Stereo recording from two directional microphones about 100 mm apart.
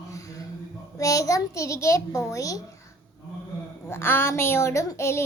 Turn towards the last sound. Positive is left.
turn(degrees=30)  # may be behind; listen again after turning